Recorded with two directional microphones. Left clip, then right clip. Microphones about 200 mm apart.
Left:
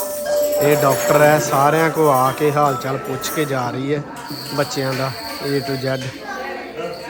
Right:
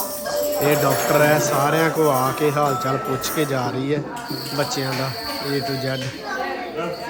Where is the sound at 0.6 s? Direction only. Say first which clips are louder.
Left 2 dB; 5° right (ahead or behind).